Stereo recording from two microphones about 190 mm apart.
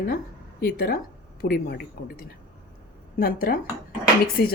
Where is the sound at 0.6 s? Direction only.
55° left (ahead or behind).